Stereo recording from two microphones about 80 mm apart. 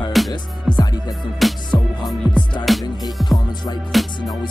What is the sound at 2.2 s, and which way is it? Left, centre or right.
Music, left.